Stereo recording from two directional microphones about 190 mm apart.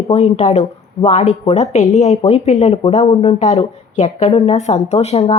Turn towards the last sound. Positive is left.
turn(degrees=35)  # may be behind; listen again after turning